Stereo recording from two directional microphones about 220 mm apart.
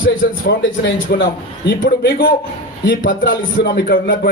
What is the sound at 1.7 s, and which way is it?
Speech, 45° left (ahead or behind).